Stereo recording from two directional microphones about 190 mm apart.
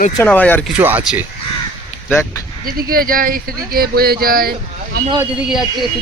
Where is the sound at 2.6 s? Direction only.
50° right (ahead or behind).